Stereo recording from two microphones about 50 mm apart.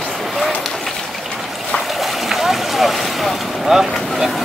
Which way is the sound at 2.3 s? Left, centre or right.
Centre.